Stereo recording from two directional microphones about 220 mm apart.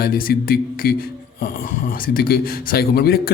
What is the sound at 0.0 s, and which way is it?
Speech, 40° left (ahead or behind).